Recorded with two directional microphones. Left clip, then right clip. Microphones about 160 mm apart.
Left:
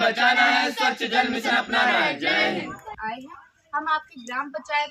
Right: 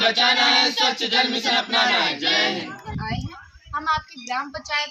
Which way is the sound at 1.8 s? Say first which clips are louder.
Right 1 dB; 20° left (ahead or behind).